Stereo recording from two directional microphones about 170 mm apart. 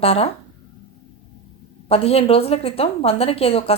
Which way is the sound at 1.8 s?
35° left (ahead or behind).